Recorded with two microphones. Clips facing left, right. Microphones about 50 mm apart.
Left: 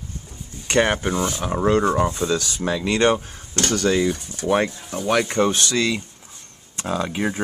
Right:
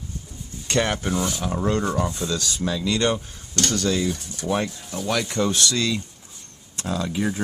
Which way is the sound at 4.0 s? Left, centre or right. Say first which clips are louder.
Left 4 dB; centre.